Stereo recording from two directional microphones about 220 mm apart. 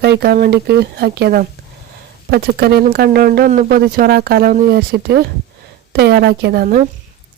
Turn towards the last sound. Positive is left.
turn(degrees=-40)  # may be behind; listen again after turning